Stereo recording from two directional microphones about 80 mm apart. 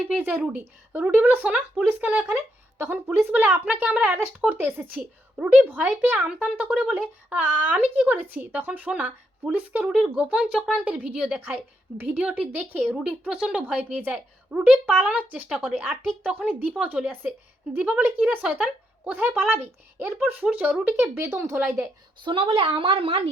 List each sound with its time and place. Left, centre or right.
0.2 s speech: right
9.8 s speech: centre
10.2 s speech: centre
15.4 s speech: centre
16.2 s a woman's voice: centre
21.0 s speech: right
22.2 s a woman's voice: right